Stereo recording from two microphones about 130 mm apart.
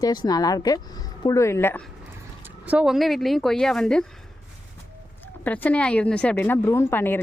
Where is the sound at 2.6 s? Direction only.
5° right (ahead or behind).